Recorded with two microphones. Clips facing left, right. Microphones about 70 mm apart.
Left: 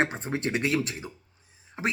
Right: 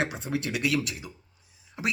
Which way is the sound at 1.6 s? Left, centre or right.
Left.